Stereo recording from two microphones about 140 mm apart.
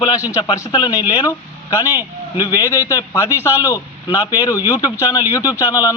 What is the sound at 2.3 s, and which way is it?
A man's voice, 25° left (ahead or behind).